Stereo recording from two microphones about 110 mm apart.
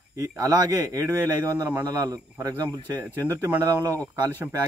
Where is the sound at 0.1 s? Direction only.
35° right (ahead or behind).